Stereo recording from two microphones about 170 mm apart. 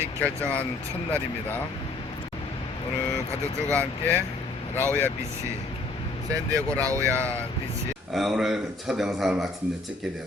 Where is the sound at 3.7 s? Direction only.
10° left (ahead or behind).